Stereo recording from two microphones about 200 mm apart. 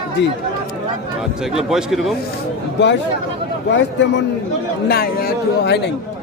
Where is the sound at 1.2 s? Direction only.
5° right (ahead or behind).